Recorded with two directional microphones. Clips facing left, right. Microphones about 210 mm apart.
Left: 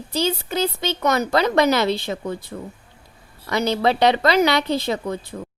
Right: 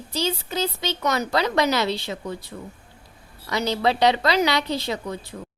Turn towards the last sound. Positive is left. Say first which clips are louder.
# left 4 dB
turn(degrees=55)  # may be behind; listen again after turning